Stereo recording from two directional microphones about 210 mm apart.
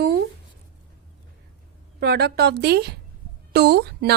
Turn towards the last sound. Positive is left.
turn(degrees=-50)  # may be behind; listen again after turning